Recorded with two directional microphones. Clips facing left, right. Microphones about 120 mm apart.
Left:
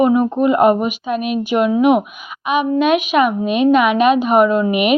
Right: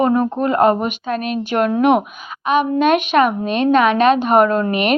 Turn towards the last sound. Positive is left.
turn(degrees=10)  # may be behind; listen again after turning